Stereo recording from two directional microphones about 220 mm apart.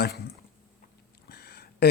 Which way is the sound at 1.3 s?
45° left (ahead or behind).